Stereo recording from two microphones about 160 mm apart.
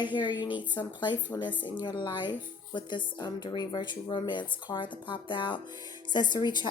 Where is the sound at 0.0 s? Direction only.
30° left (ahead or behind).